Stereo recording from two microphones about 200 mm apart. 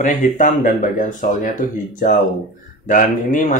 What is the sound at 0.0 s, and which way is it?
Speech, 40° left (ahead or behind).